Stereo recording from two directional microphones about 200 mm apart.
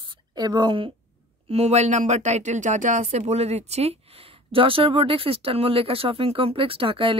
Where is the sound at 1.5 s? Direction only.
30° right (ahead or behind).